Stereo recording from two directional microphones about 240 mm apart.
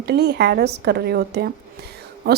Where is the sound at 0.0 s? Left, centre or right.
Right.